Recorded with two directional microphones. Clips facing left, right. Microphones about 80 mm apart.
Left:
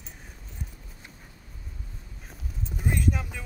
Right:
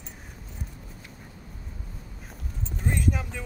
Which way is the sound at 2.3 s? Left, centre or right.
Centre.